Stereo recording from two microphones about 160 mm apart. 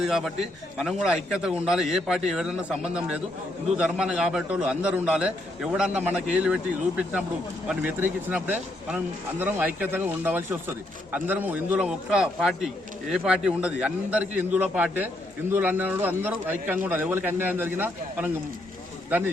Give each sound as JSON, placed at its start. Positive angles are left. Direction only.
{"t": 0.0, "sound": "a man's voice", "side_deg": 0}